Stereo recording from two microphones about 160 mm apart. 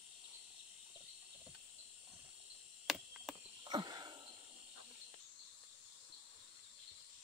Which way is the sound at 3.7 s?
25° right (ahead or behind).